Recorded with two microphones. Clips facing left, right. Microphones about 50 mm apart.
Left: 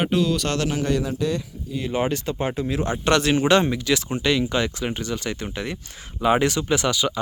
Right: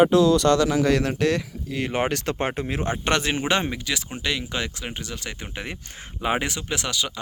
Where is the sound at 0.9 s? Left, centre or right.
Right.